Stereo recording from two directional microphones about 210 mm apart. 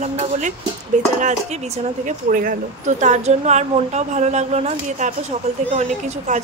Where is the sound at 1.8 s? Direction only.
35° right (ahead or behind).